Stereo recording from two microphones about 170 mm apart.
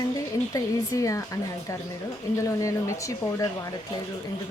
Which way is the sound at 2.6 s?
20° left (ahead or behind).